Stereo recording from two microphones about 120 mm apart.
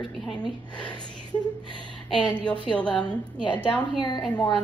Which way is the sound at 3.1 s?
40° left (ahead or behind).